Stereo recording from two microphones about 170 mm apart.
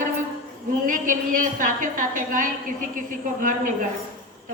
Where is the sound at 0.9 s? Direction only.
50° right (ahead or behind).